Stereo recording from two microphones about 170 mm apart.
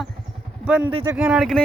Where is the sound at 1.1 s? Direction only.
5° right (ahead or behind).